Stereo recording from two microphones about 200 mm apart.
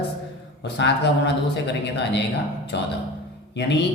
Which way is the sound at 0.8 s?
60° left (ahead or behind).